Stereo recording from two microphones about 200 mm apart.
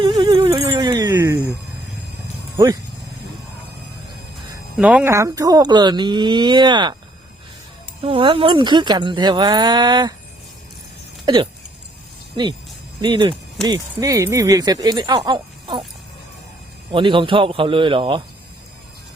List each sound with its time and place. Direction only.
0.0 s a sound: 20° right (ahead or behind)
4.8 s speech: 5° right (ahead or behind); by 6.9 s 20° right (ahead or behind)
8.0 s speech: 25° right (ahead or behind)
13.0 s speech: 25° right (ahead or behind)
16.9 s speech: 25° right (ahead or behind)